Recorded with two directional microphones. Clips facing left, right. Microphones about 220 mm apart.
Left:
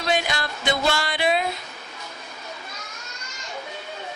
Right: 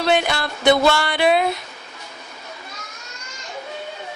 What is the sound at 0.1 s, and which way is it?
Music, 60° right (ahead or behind).